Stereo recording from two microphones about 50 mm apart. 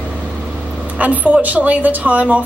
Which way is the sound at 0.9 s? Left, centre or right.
Right.